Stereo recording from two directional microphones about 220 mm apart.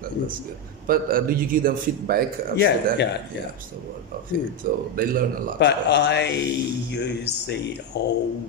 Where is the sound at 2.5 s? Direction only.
50° left (ahead or behind).